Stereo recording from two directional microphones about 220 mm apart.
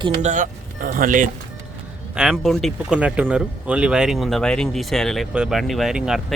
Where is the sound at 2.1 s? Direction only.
5° right (ahead or behind).